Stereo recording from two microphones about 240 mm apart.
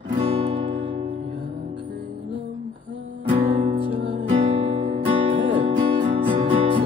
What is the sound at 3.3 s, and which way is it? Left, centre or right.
Music, right.